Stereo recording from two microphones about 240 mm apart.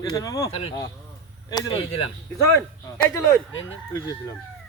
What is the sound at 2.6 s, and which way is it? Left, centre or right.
Speech, centre.